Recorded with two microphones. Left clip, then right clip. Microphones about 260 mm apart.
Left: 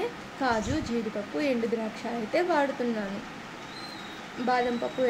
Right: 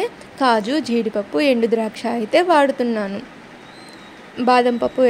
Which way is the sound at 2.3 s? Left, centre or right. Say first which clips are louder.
Right 11 dB; right.